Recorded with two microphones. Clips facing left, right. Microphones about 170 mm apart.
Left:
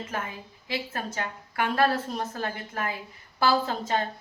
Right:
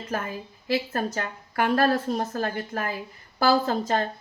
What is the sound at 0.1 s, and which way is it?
A woman's voice, 40° right (ahead or behind).